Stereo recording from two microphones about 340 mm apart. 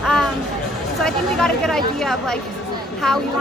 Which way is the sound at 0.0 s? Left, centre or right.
Centre.